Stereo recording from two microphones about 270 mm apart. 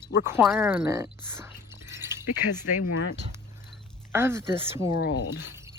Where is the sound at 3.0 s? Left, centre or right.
Left.